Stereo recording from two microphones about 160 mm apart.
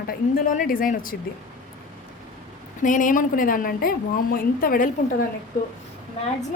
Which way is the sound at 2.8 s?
55° left (ahead or behind).